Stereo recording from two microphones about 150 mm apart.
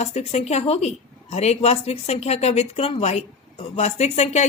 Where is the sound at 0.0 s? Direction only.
45° left (ahead or behind).